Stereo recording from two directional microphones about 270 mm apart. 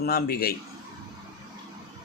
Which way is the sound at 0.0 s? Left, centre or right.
Left.